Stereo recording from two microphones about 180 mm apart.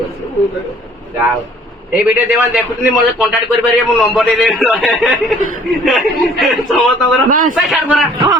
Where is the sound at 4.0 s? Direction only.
Centre (ahead or behind).